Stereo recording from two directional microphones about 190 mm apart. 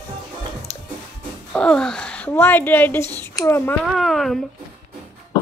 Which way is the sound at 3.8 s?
Centre (ahead or behind).